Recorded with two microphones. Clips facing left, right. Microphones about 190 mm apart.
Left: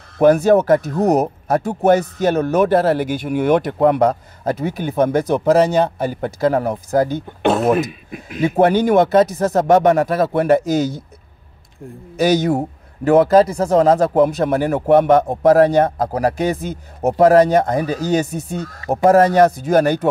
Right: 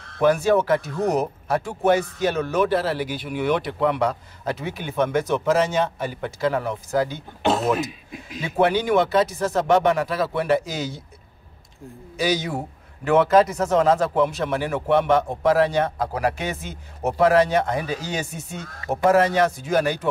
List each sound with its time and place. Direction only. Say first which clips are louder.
0.2 s speech: left 6 dB; 45° left (ahead or behind)
12.2 s a man's voice: left 8 dB; 45° left (ahead or behind)